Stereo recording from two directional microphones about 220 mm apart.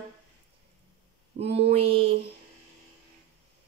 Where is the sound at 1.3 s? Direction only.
40° right (ahead or behind).